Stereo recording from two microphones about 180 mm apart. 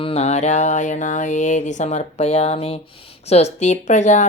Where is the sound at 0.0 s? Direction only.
35° left (ahead or behind).